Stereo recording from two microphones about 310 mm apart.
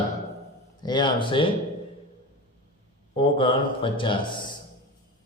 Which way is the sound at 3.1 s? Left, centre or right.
Centre.